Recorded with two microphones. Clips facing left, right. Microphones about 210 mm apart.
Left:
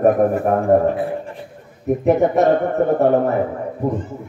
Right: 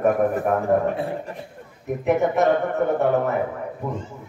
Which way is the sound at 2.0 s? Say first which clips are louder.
Left 4 dB; 35° left (ahead or behind).